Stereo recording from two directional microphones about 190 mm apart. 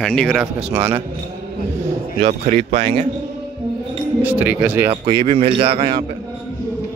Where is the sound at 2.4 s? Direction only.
35° right (ahead or behind).